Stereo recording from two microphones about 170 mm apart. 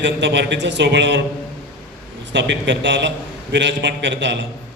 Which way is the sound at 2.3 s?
90° right.